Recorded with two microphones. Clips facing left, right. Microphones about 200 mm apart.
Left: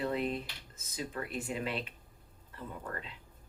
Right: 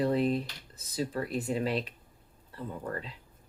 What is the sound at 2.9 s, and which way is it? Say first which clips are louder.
Speech: right 5 dB; 35° right (ahead or behind).